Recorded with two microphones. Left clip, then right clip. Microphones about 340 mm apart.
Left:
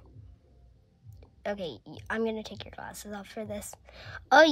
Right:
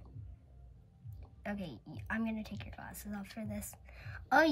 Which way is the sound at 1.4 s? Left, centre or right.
Left.